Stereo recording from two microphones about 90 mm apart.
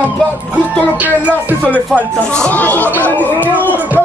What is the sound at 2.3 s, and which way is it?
Speech, 15° left (ahead or behind).